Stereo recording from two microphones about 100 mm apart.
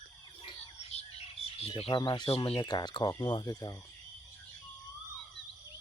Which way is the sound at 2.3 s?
70° left (ahead or behind).